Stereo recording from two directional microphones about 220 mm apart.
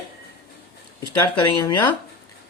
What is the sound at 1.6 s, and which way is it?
Speech, 20° left (ahead or behind).